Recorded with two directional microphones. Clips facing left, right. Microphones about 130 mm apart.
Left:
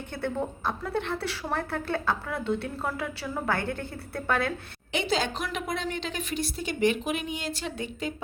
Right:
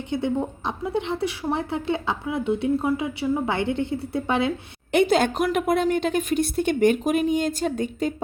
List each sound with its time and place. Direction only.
0.1 s a woman's voice: 15° right (ahead or behind)
4.9 s a woman's voice: 55° right (ahead or behind)